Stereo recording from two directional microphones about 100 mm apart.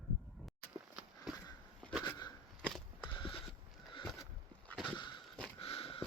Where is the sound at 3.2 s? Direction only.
65° left (ahead or behind).